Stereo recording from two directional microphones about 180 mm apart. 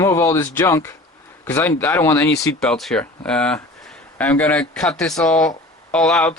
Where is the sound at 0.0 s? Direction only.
15° left (ahead or behind).